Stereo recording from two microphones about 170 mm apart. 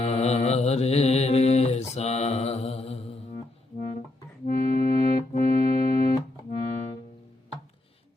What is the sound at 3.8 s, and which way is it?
Music, 55° left (ahead or behind).